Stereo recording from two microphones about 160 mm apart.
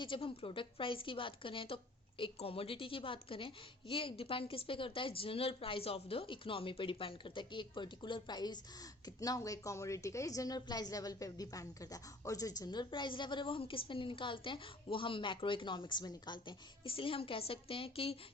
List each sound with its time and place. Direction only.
0.0 s a woman's voice: 35° left (ahead or behind)